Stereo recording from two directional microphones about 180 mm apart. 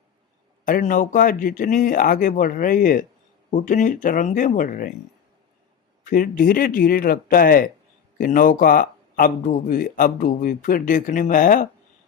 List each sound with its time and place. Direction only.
0.6 s speech: 45° left (ahead or behind)
6.1 s speech: 50° left (ahead or behind)